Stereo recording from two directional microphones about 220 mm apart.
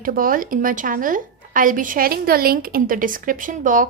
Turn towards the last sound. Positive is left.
turn(degrees=-35)  # may be behind; listen again after turning